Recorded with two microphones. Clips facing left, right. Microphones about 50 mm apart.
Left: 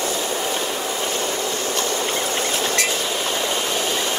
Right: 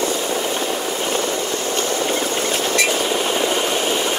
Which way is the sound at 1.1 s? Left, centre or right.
Right.